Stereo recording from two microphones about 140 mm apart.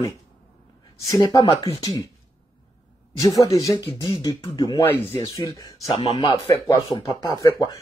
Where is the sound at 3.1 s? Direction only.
25° left (ahead or behind).